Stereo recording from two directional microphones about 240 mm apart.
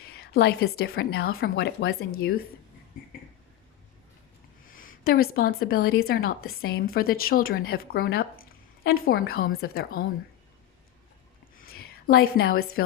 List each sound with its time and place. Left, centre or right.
0.1 s a woman's voice: left
4.7 s a woman's voice: left
11.5 s a sound: left